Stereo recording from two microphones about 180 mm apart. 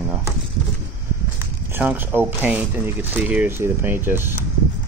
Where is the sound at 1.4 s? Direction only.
10° right (ahead or behind).